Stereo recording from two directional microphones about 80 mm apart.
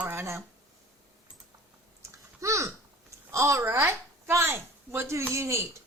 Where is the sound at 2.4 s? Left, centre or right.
Right.